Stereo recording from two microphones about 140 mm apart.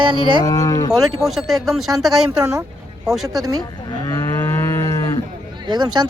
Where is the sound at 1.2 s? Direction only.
Centre (ahead or behind).